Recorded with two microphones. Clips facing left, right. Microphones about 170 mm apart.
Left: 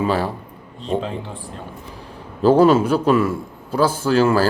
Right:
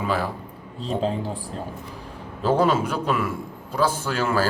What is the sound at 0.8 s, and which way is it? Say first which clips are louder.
Speech: left 1 dB; 35° right (ahead or behind).